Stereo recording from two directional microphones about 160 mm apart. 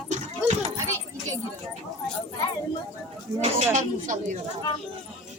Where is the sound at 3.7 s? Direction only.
55° right (ahead or behind).